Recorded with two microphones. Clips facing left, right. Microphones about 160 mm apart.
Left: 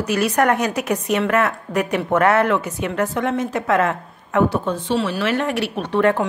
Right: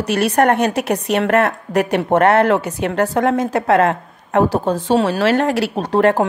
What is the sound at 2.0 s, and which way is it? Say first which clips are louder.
A woman's voice: right 3 dB; 30° right (ahead or behind).